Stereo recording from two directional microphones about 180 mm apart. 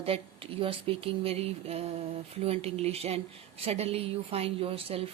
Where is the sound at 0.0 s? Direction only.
30° right (ahead or behind).